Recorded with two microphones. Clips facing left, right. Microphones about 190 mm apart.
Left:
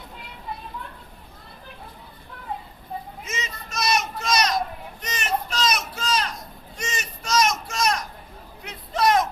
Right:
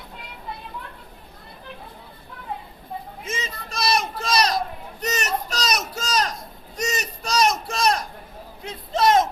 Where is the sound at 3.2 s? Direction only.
30° right (ahead or behind).